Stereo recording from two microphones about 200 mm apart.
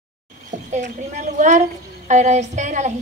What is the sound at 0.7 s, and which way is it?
A woman's voice, 35° right (ahead or behind).